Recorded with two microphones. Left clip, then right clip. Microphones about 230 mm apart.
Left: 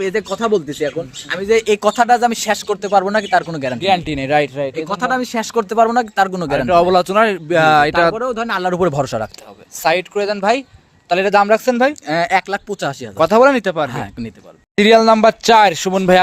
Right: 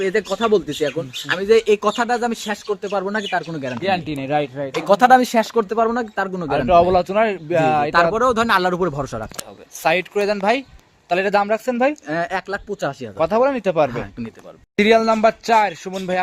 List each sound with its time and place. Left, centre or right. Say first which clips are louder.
0.0 s speech: left 1 dB; left
1.5 s speech: left 2 dB; left
4.9 s speech: right 10 dB; right
5.5 s speech: left 5 dB; left
6.6 s a man's voice: left 2 dB; left
8.1 s speech: right 3 dB; centre
8.7 s speech: left 6 dB; left
9.8 s a man's voice: left 3 dB; left
10.2 s speech: left 1 dB; centre
10.4 s a man's voice: left 3 dB; centre
12.0 s speech: left 7 dB; left
14.8 s speech: left 5 dB; left